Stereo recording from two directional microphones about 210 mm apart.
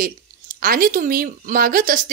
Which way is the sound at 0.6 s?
45° right (ahead or behind).